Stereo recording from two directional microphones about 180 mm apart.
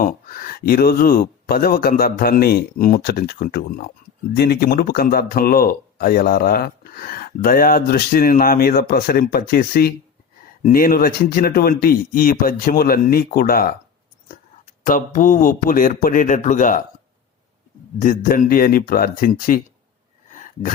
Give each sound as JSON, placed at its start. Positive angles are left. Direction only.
{"t": 0.0, "sound": "speech", "side_deg": 50}
{"t": 14.8, "sound": "a man's voice", "side_deg": 50}
{"t": 18.0, "sound": "a man's voice", "side_deg": 50}
{"t": 20.3, "sound": "a sound", "side_deg": 45}